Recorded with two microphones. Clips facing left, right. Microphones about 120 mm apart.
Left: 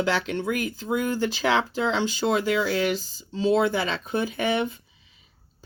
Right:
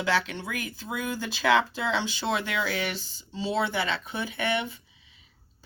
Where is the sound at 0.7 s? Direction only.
45° left (ahead or behind).